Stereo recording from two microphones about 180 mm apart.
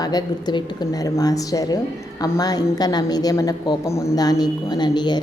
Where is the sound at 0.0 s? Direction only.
20° left (ahead or behind).